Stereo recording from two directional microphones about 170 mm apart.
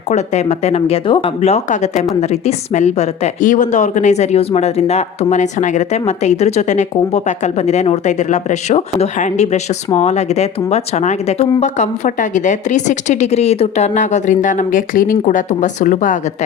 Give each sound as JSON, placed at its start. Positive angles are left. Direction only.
{"t": 0.1, "sound": "a woman's voice", "side_deg": 40}